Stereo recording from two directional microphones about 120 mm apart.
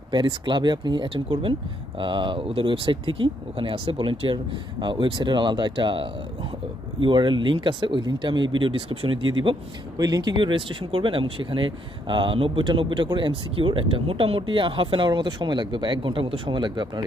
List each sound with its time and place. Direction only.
0.1 s speech: 40° right (ahead or behind)
9.9 s speech: 35° right (ahead or behind)